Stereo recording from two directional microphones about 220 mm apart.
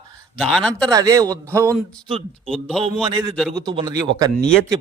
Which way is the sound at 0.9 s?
15° right (ahead or behind).